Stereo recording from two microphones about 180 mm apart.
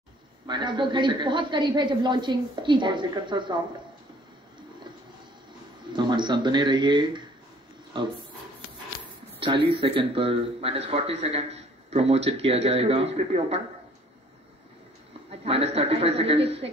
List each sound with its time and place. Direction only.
0.5 s speech: 25° right (ahead or behind)
5.9 s speech: 25° right (ahead or behind)
9.4 s speech: 30° right (ahead or behind)
15.4 s speech: 30° right (ahead or behind)